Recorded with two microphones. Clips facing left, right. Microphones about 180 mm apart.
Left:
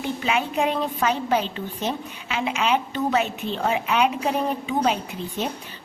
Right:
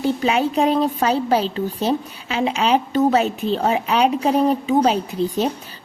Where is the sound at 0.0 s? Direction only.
35° right (ahead or behind).